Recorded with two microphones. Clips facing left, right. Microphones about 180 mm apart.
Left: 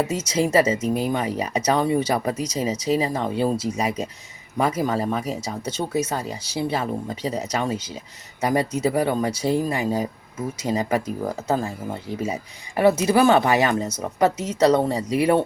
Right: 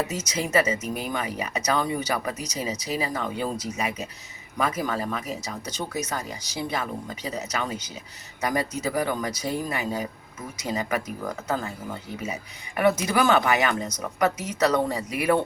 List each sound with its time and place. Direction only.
0.1 s speech: 30° left (ahead or behind)